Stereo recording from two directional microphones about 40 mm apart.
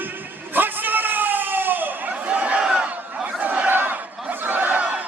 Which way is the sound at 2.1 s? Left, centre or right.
Right.